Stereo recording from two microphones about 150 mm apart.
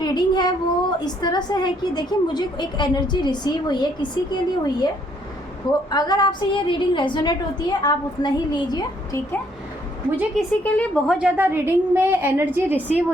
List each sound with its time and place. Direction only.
0.0 s a woman's voice: 30° left (ahead or behind)
5.9 s a woman's voice: 25° left (ahead or behind)
10.3 s speech: 10° left (ahead or behind)
11.1 s a woman's voice: 10° right (ahead or behind)